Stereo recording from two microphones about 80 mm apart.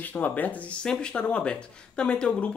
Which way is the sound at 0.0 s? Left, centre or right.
Left.